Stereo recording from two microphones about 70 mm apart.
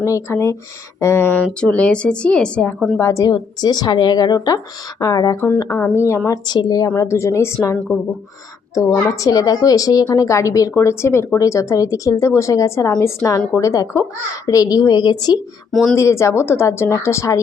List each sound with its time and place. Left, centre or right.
0.0 s speech: left
1.7 s speech: centre
3.0 s speech: left
3.2 s speech: left
5.5 s speech: left
6.5 s speech: left
6.9 s a woman's voice: left
10.2 s speech: left
14.4 s speech: left
15.7 s speech: centre
16.0 s speech: left